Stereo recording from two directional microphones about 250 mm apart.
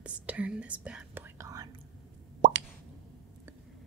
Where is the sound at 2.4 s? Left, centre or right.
Right.